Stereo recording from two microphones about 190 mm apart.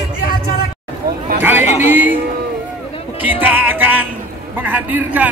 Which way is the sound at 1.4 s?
10° right (ahead or behind).